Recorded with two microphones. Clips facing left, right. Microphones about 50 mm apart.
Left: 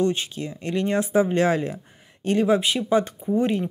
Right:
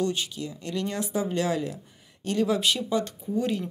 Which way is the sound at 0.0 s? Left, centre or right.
Left.